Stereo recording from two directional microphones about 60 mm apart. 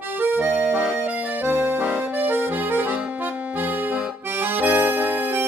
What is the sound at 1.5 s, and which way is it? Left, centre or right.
Accordion, right.